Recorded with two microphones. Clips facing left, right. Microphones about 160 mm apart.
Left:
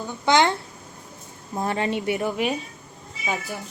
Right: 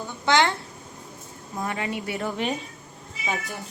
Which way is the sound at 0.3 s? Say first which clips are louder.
Left 2 dB; 20° left (ahead or behind).